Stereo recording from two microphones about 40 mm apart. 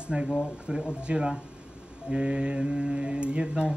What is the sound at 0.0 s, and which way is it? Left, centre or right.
Speech, right.